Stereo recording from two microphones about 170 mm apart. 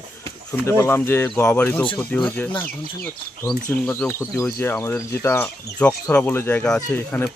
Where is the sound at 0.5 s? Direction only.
15° left (ahead or behind).